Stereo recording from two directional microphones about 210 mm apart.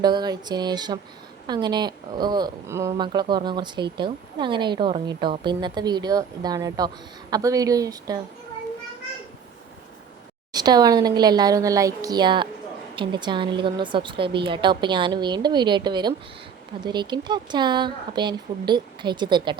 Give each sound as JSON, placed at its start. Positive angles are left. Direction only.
{"t": 0.0, "sound": "speech", "side_deg": -20}
{"t": 10.5, "sound": "speech", "side_deg": -20}